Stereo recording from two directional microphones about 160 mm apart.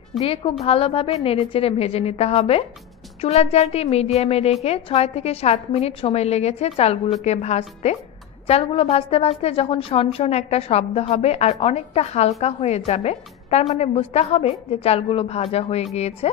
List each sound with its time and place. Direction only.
0.2 s a woman's voice: 35° left (ahead or behind)